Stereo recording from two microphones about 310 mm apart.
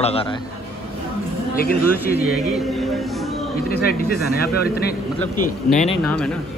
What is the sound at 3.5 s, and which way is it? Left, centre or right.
Speech, left.